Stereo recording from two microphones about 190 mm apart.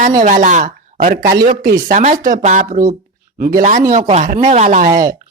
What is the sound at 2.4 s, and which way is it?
Speech, 40° right (ahead or behind).